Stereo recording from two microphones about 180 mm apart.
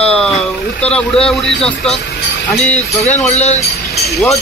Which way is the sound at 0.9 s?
5° left (ahead or behind).